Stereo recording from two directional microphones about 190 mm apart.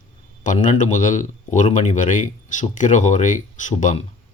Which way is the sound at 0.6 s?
40° left (ahead or behind).